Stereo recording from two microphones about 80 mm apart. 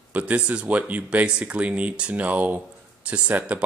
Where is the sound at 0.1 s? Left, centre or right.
Centre.